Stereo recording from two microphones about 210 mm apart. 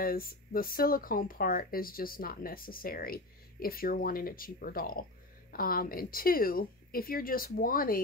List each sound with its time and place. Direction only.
0.0 s speech: 45° left (ahead or behind)